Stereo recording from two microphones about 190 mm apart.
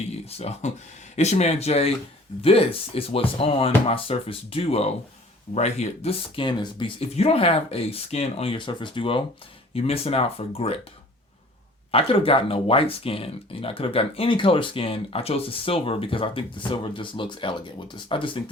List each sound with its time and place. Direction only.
0.3 s speech: 35° left (ahead or behind)
11.9 s speech: 30° left (ahead or behind)